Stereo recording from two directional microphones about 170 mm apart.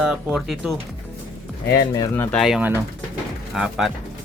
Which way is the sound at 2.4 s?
5° right (ahead or behind).